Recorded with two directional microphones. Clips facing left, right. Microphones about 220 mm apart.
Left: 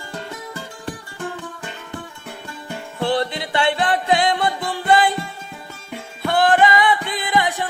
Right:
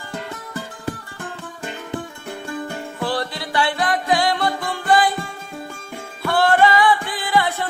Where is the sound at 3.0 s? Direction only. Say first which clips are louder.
Left 4 dB; 25° left (ahead or behind).